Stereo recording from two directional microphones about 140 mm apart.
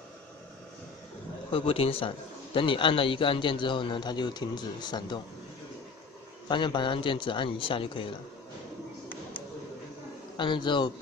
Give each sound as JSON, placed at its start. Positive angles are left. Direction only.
{"t": 1.5, "sound": "a man's voice", "side_deg": 40}
{"t": 6.5, "sound": "a man's voice", "side_deg": 35}
{"t": 10.3, "sound": "a man's voice", "side_deg": 35}